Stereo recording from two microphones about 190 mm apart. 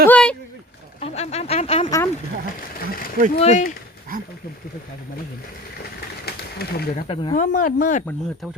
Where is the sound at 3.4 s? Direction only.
40° left (ahead or behind).